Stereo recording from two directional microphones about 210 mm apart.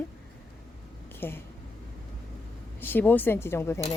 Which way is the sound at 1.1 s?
10° left (ahead or behind).